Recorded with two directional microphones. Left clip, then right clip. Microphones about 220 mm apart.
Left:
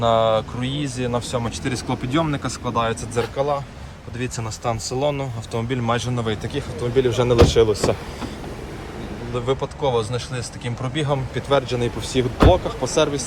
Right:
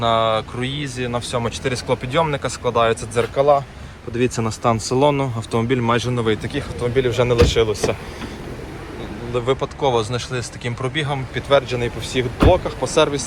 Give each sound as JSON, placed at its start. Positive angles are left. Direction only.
{"t": 0.0, "sound": "speech", "side_deg": 10}
{"t": 9.3, "sound": "speech", "side_deg": 10}